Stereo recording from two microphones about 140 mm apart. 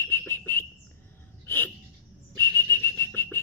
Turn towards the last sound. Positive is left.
turn(degrees=15)  # may be behind; listen again after turning